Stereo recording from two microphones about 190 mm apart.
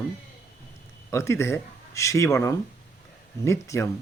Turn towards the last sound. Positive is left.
turn(degrees=15)  # may be behind; listen again after turning